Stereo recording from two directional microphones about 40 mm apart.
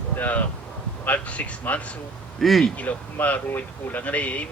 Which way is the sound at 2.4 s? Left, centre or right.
Centre.